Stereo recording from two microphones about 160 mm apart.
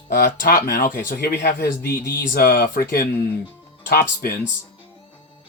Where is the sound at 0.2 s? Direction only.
60° left (ahead or behind).